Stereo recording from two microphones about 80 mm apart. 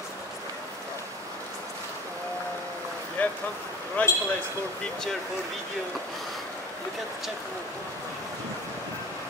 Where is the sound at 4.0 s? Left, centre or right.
Centre.